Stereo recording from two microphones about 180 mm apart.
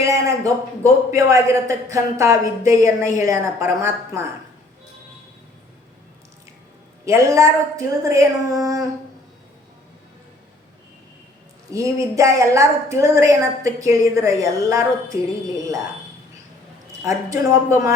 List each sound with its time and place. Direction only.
0.0 s a sound: 15° right (ahead or behind)
1.1 s a woman's voice: 15° right (ahead or behind)
7.0 s a woman's voice: 15° right (ahead or behind)
11.7 s a woman's voice: 15° right (ahead or behind)
17.0 s a woman's voice: 15° right (ahead or behind)